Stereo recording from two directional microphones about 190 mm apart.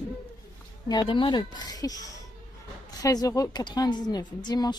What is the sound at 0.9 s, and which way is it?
A woman's voice, 25° left (ahead or behind).